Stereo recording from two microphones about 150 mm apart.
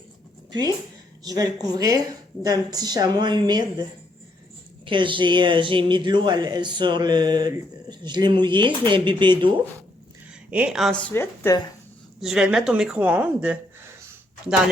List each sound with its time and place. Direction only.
1.2 s speech: 25° right (ahead or behind)
4.9 s speech: 35° right (ahead or behind)
10.5 s a woman's voice: 5° right (ahead or behind); by 11.5 s 15° left (ahead or behind)
12.2 s speech: 5° right (ahead or behind)